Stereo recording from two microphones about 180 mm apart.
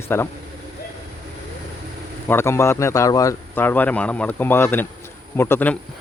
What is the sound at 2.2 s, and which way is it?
Speech, 15° left (ahead or behind).